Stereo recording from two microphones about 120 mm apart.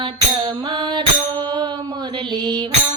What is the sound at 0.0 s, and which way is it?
Music, 45° right (ahead or behind).